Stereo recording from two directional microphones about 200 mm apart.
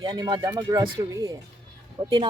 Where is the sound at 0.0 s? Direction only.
20° right (ahead or behind).